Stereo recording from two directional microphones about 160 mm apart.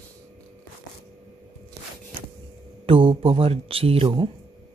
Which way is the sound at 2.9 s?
35° right (ahead or behind).